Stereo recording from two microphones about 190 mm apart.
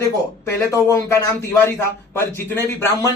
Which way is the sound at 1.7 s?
10° left (ahead or behind).